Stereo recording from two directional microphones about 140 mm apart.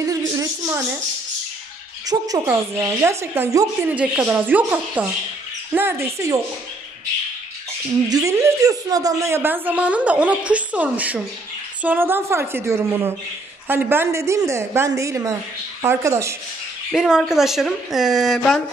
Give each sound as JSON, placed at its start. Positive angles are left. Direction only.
{"t": 0.0, "sound": "a sound", "side_deg": -25}
{"t": 2.0, "sound": "speech", "side_deg": -25}
{"t": 8.1, "sound": "a woman's voice", "side_deg": -25}
{"t": 16.9, "sound": "a woman's voice", "side_deg": 0}